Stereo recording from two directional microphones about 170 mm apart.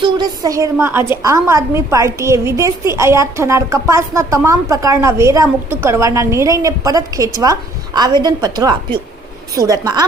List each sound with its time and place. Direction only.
0.0 s a woman's voice: 25° right (ahead or behind)